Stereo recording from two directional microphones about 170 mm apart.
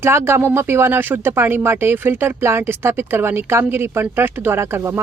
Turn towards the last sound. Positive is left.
turn(degrees=-15)  # may be behind; listen again after turning